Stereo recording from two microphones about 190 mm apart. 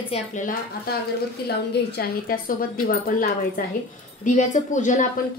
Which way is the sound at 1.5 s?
60° left (ahead or behind).